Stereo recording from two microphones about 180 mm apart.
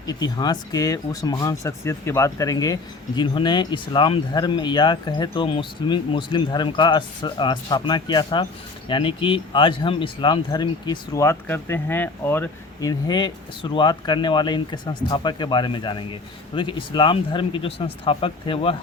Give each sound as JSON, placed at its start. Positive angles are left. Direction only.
{"t": 0.1, "sound": "speech", "side_deg": 20}